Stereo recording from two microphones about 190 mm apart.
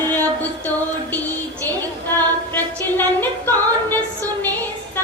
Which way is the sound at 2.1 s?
10° left (ahead or behind).